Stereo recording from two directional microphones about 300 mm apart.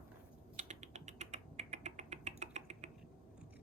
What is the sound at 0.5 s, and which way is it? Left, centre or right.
Rodents, right.